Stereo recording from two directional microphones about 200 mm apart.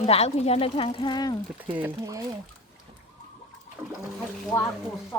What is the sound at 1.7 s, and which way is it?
Speech, 10° right (ahead or behind).